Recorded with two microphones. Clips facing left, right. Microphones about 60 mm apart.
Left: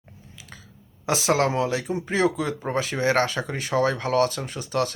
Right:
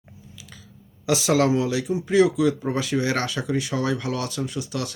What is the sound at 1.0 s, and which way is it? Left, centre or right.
Speech, left.